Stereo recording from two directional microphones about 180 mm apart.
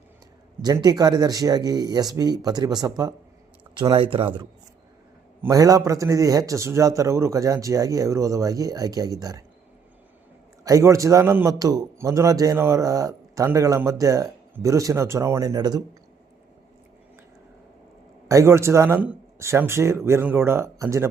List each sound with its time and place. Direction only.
0.6 s speech: 20° right (ahead or behind)
5.4 s a man's voice: 20° right (ahead or behind)
10.6 s a man's voice: 15° right (ahead or behind)
18.3 s a man's voice: 15° right (ahead or behind)